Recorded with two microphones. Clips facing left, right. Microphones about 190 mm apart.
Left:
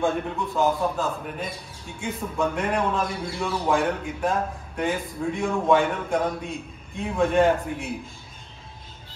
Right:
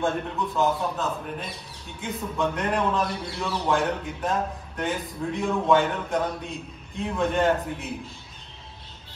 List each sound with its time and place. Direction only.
0.0 s a man's voice: centre (ahead or behind)